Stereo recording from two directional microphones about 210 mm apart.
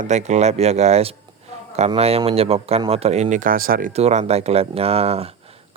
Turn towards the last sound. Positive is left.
turn(degrees=-30)  # may be behind; listen again after turning